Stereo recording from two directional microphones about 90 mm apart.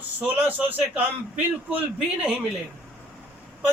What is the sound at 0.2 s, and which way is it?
A man's voice, 20° right (ahead or behind).